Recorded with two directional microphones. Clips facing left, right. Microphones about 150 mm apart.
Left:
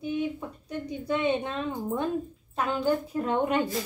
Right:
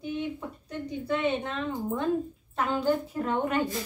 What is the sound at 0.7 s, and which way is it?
A woman's voice, 15° left (ahead or behind).